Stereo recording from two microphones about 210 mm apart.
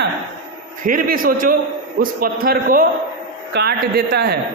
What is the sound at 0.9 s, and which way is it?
A man's voice, 40° right (ahead or behind).